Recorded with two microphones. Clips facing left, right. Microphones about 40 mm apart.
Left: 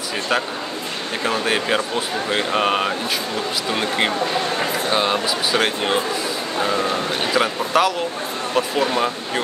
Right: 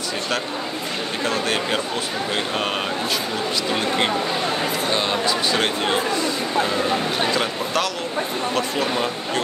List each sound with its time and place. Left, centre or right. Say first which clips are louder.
1.2 s speech: left 3 dB; centre
4.9 s speech: left 3 dB; centre
7.3 s speech: left 4 dB; centre